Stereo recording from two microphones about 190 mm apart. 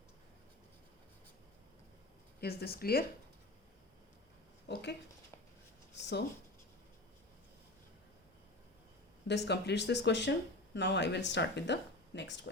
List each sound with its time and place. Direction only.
2.4 s speech: 55° left (ahead or behind)
4.7 s speech: 65° left (ahead or behind)
9.2 s speech: 65° left (ahead or behind)